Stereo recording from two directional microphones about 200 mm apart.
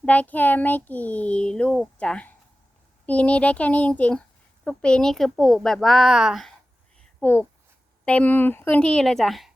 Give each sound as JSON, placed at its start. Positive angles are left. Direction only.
{"t": 0.0, "sound": "a child's voice", "side_deg": 5}
{"t": 7.2, "sound": "speech", "side_deg": 10}